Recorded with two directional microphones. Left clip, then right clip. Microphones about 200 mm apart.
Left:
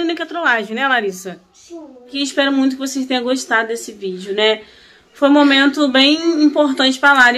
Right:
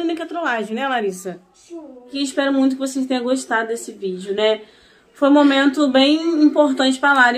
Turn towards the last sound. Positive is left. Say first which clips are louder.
# left 3 dB
turn(degrees=10)  # may be behind; listen again after turning